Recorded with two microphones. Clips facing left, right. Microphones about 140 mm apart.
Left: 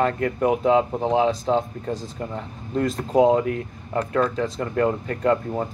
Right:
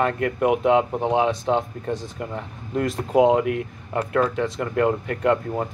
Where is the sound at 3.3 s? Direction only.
30° left (ahead or behind).